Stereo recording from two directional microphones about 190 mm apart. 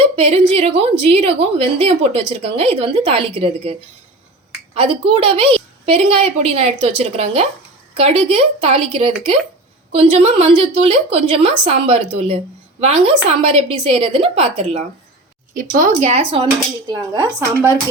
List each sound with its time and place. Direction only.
0.2 s a woman's voice: 30° right (ahead or behind)
15.5 s a woman's voice: 45° right (ahead or behind)
16.8 s speech: 20° right (ahead or behind)